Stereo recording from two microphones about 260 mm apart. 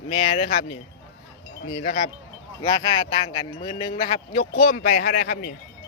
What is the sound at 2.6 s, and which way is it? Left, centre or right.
A man's voice, centre.